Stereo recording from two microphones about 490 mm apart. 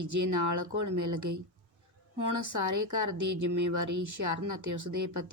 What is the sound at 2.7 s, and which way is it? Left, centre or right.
Speech, right.